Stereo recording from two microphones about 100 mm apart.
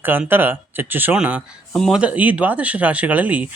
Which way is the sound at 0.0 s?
20° right (ahead or behind).